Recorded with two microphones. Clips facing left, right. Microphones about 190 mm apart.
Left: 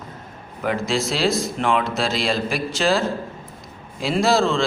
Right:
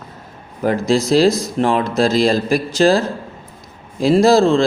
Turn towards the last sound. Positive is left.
turn(degrees=-35)  # may be behind; listen again after turning